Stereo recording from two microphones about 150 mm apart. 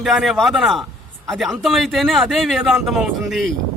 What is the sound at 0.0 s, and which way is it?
A man's voice, centre (ahead or behind).